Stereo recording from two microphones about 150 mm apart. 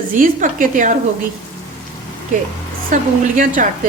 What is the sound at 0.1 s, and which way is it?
Speech, 60° right (ahead or behind).